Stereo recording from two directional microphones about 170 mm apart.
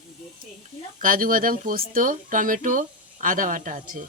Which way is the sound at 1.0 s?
55° right (ahead or behind).